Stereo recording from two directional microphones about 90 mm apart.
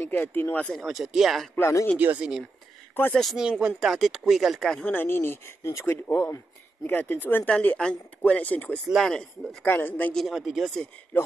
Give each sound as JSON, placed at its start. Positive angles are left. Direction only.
{"t": 0.0, "sound": "speech", "side_deg": 20}
{"t": 0.7, "sound": "speech", "side_deg": 0}
{"t": 1.5, "sound": "speech", "side_deg": 30}
{"t": 2.0, "sound": "speech", "side_deg": -20}
{"t": 3.1, "sound": "speech", "side_deg": 5}
{"t": 3.3, "sound": "speech", "side_deg": -10}
{"t": 4.9, "sound": "speech", "side_deg": 25}
{"t": 5.9, "sound": "speech", "side_deg": 20}
{"t": 8.9, "sound": "speech", "side_deg": 5}
{"t": 9.7, "sound": "speech", "side_deg": 20}
{"t": 10.1, "sound": "speech", "side_deg": 0}
{"t": 11.1, "sound": "speech", "side_deg": 20}